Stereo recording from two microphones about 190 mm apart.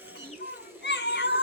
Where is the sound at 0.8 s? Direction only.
65° left (ahead or behind).